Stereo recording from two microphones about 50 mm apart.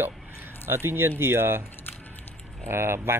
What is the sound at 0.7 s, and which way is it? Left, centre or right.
Speech, right.